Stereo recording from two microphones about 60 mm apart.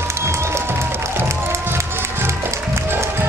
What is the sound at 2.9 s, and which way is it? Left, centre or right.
Music, right.